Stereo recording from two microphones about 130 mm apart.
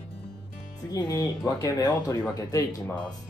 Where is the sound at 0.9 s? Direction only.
30° left (ahead or behind).